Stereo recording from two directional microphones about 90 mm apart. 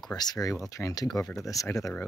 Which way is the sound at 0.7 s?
35° left (ahead or behind).